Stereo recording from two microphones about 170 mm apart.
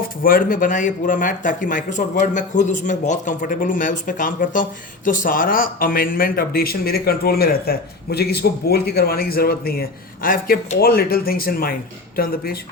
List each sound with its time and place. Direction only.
0.2 s speech: 55° left (ahead or behind)